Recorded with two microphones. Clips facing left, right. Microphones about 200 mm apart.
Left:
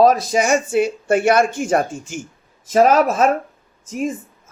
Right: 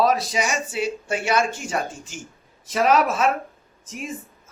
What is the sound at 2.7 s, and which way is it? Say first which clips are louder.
Speech: left 5 dB; 40° left (ahead or behind).